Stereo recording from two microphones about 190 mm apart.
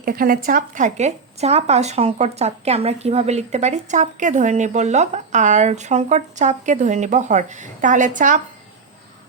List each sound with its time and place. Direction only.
0.0 s speech: 50° right (ahead or behind)